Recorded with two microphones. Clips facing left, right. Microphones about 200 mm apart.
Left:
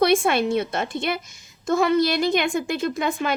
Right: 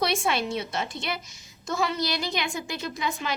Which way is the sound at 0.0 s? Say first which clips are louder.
Left 7 dB; 55° left (ahead or behind).